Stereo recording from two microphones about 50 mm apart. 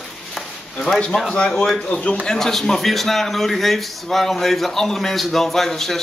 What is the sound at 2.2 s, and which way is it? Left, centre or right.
Speech, centre.